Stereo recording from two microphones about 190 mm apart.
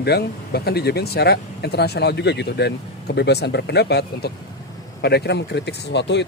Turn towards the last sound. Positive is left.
turn(degrees=65)  # may be behind; listen again after turning